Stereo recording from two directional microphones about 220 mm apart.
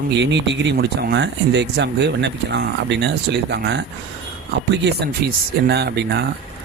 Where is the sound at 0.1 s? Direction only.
55° right (ahead or behind).